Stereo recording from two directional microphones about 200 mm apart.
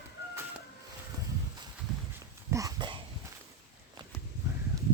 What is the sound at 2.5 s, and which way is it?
Dog, 15° right (ahead or behind).